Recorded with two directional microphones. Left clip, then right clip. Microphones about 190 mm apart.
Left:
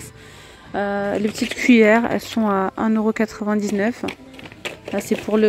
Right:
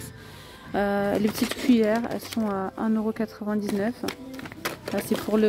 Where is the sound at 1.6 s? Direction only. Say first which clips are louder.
Left 10 dB; 15° left (ahead or behind).